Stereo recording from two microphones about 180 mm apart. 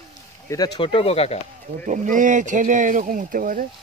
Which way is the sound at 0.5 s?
25° left (ahead or behind).